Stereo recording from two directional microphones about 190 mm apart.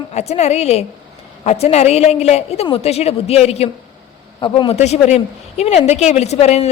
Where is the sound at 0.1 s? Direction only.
35° left (ahead or behind).